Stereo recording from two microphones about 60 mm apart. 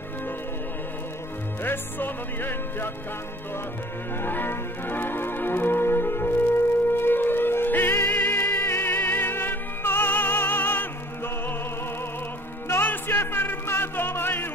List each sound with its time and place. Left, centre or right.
1.6 s music: left
4.2 s music: left
12.6 s music: left